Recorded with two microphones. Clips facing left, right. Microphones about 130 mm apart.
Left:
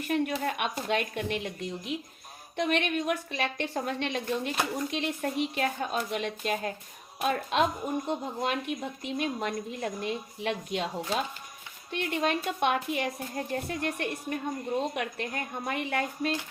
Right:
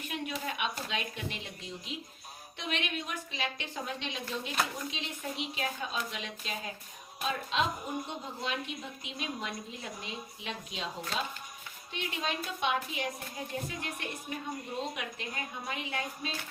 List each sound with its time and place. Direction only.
0.1 s a woman's voice: 55° left (ahead or behind)
11.9 s a woman's voice: 55° left (ahead or behind)